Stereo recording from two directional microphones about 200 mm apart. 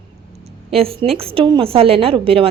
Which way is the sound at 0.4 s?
30° right (ahead or behind).